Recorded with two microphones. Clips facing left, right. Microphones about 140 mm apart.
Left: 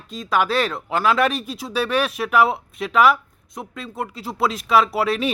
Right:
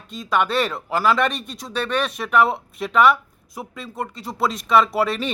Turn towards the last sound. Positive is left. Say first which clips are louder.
# left 1 dB
turn(degrees=0)  # may be behind; listen again after turning